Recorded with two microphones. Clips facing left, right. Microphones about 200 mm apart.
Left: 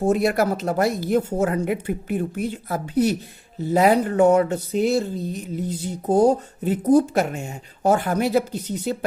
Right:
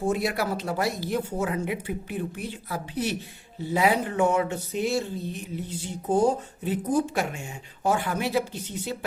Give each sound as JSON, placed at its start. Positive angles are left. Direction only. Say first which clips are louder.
{"t": 0.0, "sound": "speech", "louder": "left 7 dB", "side_deg": 45}